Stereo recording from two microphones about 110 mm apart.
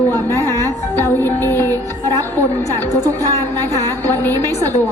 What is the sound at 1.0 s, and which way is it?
Music, 20° left (ahead or behind).